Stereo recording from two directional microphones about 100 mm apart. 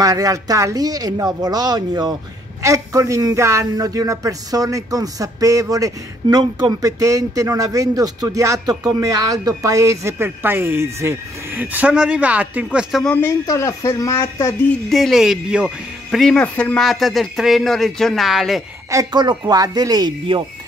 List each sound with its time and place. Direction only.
0.0 s speech: 35° right (ahead or behind)
2.6 s speech: 30° right (ahead or behind)
11.6 s a man's voice: 15° right (ahead or behind)
12.6 s speech: centre (ahead or behind)
13.1 s speech: 20° left (ahead or behind)
13.5 s speech: 35° left (ahead or behind)
14.9 s speech: centre (ahead or behind)
19.1 s speech: 45° right (ahead or behind)